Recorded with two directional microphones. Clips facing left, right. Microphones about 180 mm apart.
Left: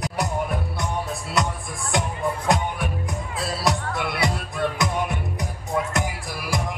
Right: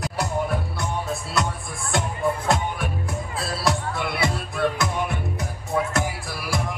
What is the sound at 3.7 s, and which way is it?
Music, 20° left (ahead or behind).